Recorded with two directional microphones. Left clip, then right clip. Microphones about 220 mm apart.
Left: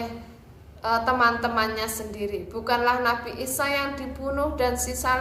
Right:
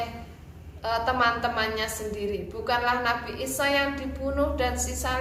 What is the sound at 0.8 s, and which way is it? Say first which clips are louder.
A woman's voice: left 3 dB; 25° left (ahead or behind).